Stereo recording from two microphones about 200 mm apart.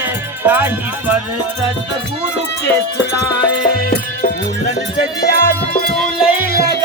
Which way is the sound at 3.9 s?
45° left (ahead or behind).